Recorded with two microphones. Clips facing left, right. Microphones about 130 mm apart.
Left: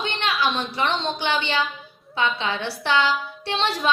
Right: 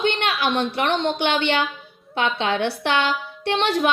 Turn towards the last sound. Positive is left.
turn(degrees=-60)  # may be behind; listen again after turning